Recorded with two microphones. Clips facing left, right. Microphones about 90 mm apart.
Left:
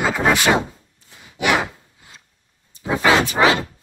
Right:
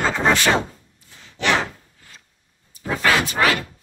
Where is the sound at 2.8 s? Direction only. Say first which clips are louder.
Left 3 dB; 15° left (ahead or behind).